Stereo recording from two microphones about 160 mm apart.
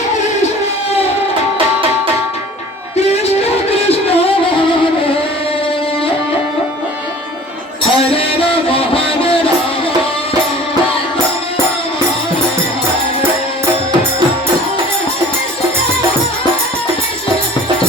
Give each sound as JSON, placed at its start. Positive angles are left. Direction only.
{"t": 3.8, "sound": "music", "side_deg": 40}
{"t": 7.9, "sound": "music", "side_deg": 35}